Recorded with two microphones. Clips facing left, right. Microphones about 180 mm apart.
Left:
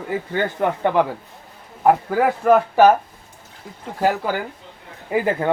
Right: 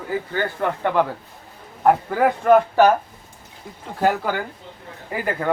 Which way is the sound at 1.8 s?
5° left (ahead or behind).